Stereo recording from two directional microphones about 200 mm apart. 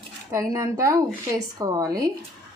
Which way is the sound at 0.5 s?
15° right (ahead or behind).